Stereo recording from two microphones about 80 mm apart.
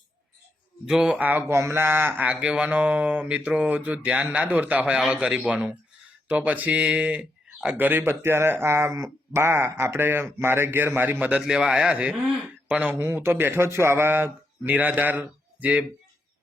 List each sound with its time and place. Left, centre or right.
0.9 s speech: centre
1.2 s speech: right
11.3 s speech: centre